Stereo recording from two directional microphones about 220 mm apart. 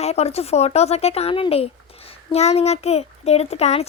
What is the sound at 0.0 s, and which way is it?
Speech, 30° left (ahead or behind).